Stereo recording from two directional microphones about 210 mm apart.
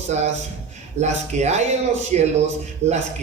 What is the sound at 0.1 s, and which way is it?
A woman's voice, 35° right (ahead or behind).